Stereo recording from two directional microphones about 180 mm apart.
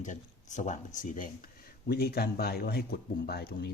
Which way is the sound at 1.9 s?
60° left (ahead or behind).